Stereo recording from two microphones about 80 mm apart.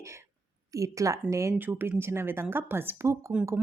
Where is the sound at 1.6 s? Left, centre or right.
Right.